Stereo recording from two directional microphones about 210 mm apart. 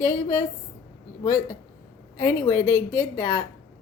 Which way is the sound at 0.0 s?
15° left (ahead or behind).